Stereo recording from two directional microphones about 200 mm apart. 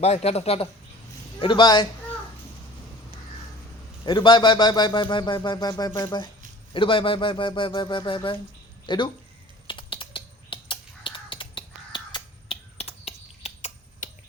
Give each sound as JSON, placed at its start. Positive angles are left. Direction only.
{"t": 0.0, "sound": "a man's voice", "side_deg": 30}
{"t": 4.0, "sound": "a man's voice", "side_deg": 25}
{"t": 9.6, "sound": "crow", "side_deg": 25}